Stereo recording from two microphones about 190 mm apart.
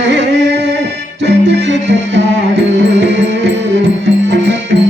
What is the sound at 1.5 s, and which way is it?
Music, 70° right (ahead or behind).